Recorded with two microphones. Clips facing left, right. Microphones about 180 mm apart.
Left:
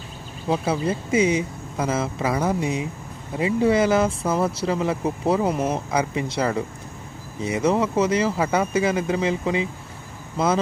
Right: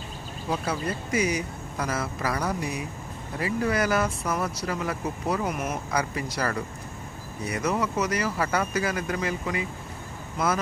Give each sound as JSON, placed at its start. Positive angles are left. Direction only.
{"t": 0.5, "sound": "speech", "side_deg": 25}